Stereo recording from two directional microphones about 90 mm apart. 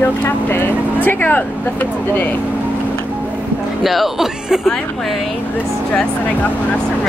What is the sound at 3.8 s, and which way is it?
Speech, centre (ahead or behind).